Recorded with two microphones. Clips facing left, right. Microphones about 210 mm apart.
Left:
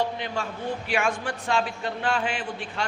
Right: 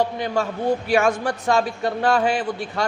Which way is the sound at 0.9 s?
40° right (ahead or behind).